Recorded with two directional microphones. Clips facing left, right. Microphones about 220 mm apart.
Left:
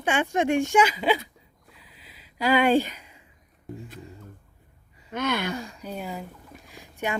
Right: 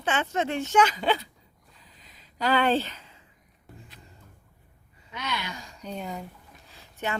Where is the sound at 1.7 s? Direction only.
10° left (ahead or behind).